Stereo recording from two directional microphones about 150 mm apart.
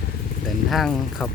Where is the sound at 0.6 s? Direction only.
Centre (ahead or behind).